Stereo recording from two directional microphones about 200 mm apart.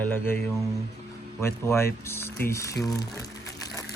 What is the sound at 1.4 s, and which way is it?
Speech, 15° left (ahead or behind).